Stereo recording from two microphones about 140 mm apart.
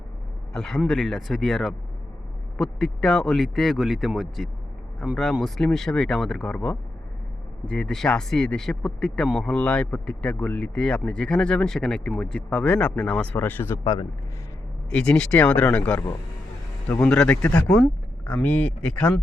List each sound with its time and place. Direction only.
0.5 s speech: 5° left (ahead or behind); by 14.1 s 25° left (ahead or behind)
14.8 s speech: 5° left (ahead or behind)